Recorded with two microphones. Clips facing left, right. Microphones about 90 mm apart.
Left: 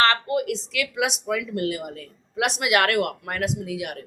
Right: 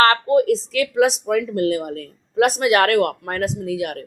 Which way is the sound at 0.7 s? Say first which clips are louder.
Right 8 dB; 40° right (ahead or behind).